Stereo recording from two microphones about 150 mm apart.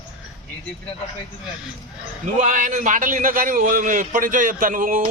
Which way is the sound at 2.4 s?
60° right (ahead or behind).